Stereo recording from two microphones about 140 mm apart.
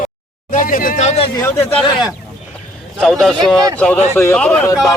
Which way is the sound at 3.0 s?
Centre (ahead or behind).